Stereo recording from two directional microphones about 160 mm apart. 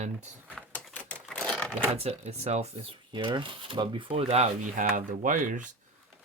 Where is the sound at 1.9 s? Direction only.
40° right (ahead or behind).